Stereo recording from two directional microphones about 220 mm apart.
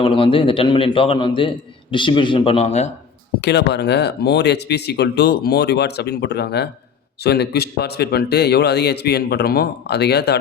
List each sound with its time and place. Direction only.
0.0 s a man's voice: 25° left (ahead or behind)
3.4 s speech: 50° left (ahead or behind)